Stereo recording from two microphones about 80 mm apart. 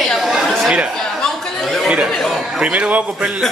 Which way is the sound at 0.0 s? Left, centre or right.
Centre.